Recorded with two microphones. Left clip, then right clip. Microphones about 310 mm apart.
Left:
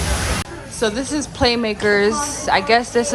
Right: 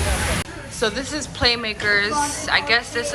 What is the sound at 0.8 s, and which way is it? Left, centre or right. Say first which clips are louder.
A woman's voice: left 3 dB; centre.